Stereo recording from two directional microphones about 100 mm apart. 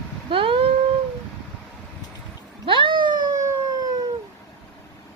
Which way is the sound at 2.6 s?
55° right (ahead or behind).